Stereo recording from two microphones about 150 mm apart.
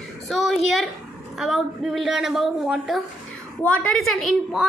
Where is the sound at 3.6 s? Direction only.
10° left (ahead or behind).